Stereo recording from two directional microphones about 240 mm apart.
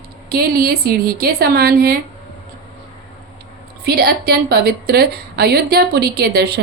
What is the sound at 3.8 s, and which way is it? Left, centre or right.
A woman's voice, right.